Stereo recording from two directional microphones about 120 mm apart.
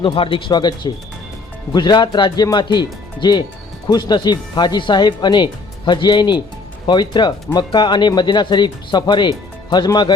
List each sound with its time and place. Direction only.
0.0 s speech: 45° left (ahead or behind)